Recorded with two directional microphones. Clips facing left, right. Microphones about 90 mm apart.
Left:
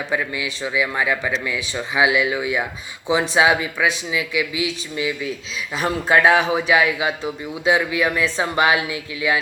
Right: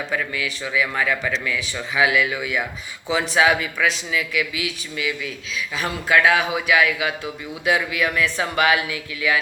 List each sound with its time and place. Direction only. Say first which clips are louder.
0.1 s speech: left 2 dB; 20° left (ahead or behind)